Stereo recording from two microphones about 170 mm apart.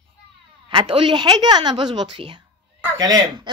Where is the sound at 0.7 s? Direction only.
30° right (ahead or behind).